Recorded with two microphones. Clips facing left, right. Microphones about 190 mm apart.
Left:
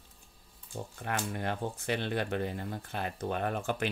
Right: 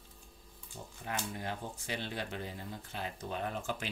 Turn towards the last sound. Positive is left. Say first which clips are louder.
# left 5 dB
turn(degrees=60)  # may be behind; listen again after turning